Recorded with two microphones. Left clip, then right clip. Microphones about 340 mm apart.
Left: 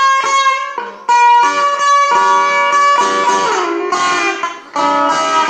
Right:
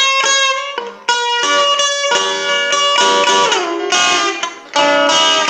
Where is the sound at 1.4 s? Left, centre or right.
Right.